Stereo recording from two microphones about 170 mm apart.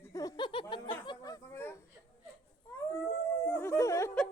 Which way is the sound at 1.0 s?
25° left (ahead or behind).